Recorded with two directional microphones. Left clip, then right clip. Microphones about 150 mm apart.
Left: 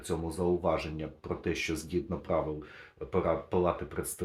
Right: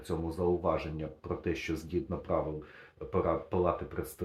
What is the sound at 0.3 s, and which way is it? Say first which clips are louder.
Speech: left 1 dB; 20° left (ahead or behind).